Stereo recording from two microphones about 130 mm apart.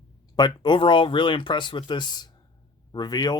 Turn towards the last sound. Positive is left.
turn(degrees=30)  # may be behind; listen again after turning